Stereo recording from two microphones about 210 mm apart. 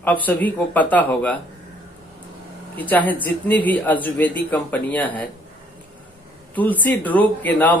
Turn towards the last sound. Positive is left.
turn(degrees=5)  # may be behind; listen again after turning